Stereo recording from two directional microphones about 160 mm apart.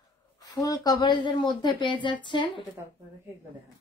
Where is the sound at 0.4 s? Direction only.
25° left (ahead or behind).